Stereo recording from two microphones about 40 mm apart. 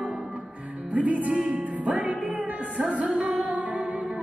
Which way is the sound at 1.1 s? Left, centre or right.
Right.